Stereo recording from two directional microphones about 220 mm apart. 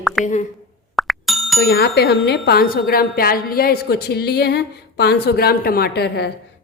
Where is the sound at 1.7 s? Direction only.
45° left (ahead or behind).